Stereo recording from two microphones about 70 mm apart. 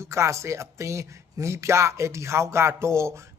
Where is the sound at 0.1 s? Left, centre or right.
Right.